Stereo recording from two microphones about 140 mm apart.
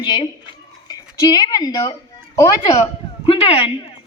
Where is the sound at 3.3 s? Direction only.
40° left (ahead or behind).